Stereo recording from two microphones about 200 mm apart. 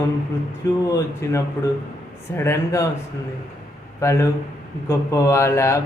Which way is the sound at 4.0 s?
15° left (ahead or behind).